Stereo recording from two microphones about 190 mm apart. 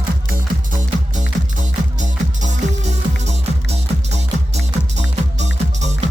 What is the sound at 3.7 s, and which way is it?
Music, 35° right (ahead or behind).